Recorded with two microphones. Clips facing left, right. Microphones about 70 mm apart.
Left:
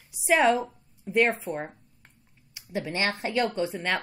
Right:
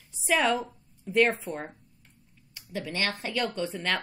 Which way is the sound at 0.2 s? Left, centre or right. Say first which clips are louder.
Left 4 dB; centre.